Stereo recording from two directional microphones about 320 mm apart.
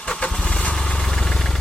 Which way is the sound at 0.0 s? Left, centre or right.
Centre.